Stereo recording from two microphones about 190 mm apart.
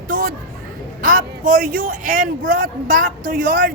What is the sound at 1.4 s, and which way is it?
Speech, 45° right (ahead or behind).